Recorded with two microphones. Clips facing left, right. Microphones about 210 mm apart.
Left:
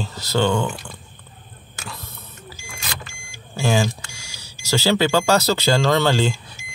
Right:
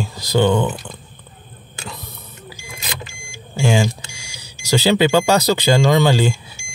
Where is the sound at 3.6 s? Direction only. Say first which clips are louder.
Right 2 dB; 15° right (ahead or behind).